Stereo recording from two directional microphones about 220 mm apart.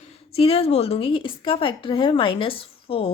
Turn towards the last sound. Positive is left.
turn(degrees=25)  # may be behind; listen again after turning